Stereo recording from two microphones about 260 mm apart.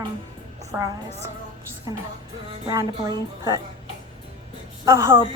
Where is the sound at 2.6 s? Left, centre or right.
Centre.